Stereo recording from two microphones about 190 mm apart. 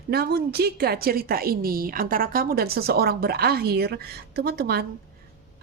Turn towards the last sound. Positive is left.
turn(degrees=-55)  # may be behind; listen again after turning